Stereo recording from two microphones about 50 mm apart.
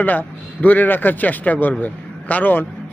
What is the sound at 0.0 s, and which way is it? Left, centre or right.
Speech, left.